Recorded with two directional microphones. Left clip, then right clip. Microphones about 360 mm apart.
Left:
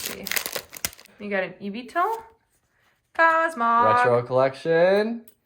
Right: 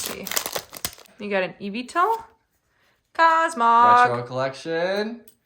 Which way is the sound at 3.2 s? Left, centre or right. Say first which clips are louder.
Right 2 dB; centre.